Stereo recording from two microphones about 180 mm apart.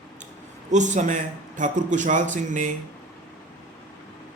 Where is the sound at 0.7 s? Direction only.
40° right (ahead or behind).